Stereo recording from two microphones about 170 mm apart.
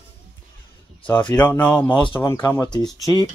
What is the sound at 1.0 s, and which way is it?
Speech, 10° left (ahead or behind).